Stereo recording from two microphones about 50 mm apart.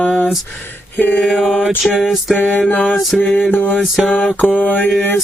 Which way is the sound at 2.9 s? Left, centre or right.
Centre.